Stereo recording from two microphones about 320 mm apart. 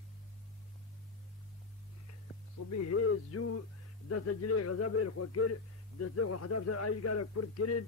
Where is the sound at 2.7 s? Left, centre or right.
Left.